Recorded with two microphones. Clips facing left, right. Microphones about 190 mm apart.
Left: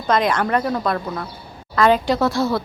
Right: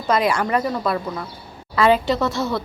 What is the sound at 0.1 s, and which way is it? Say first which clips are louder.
A woman's voice: left 1 dB; 10° right (ahead or behind).